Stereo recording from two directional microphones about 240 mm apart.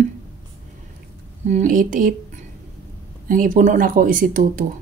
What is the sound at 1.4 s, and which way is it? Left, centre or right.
Speech, right.